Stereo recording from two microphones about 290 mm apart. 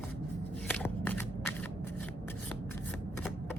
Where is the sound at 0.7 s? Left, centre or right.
Centre.